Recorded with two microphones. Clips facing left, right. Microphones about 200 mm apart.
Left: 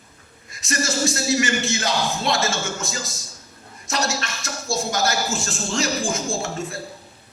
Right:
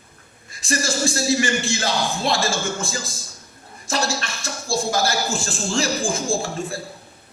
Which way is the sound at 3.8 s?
30° right (ahead or behind).